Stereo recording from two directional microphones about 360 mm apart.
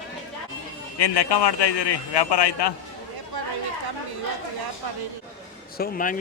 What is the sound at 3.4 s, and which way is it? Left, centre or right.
Chatter, right.